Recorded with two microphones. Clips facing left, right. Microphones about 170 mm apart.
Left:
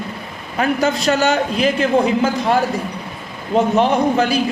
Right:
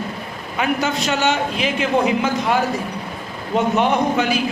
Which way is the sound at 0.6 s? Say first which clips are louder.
Left 3 dB; 40° left (ahead or behind).